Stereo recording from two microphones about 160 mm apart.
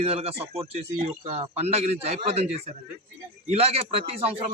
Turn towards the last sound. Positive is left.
turn(degrees=-40)  # may be behind; listen again after turning